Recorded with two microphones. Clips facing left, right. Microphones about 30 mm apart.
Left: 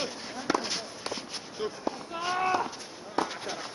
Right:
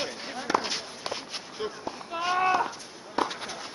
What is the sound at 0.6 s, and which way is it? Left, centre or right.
Walk, centre.